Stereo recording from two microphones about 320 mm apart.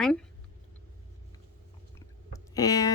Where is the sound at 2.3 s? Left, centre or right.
Centre.